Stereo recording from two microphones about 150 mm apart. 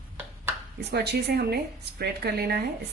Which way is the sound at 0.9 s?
90° right.